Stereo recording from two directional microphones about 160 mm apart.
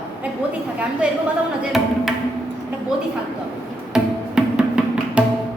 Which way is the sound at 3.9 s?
5° right (ahead or behind).